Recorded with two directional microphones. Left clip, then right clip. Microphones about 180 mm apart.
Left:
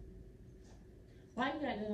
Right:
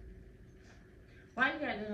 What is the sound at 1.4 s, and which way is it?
Speech, 40° left (ahead or behind).